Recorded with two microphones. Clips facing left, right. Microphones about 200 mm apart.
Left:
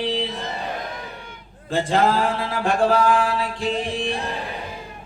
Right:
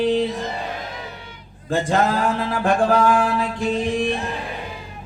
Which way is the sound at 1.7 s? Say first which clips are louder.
Even; 50° right (ahead or behind).